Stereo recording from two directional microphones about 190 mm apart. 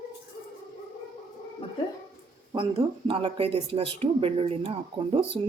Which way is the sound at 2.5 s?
30° right (ahead or behind).